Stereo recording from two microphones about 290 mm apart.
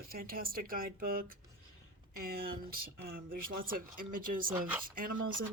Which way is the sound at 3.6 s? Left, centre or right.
Right.